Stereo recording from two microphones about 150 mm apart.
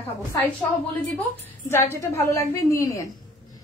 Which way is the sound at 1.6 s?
15° left (ahead or behind).